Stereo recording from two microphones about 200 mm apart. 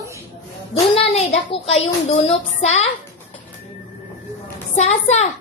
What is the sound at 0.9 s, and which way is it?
A child's voice, 30° left (ahead or behind).